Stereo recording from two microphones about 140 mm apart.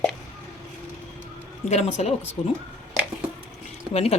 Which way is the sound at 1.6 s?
50° left (ahead or behind).